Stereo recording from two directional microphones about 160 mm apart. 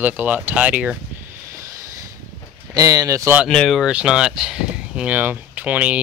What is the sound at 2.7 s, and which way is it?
Speech, 20° right (ahead or behind).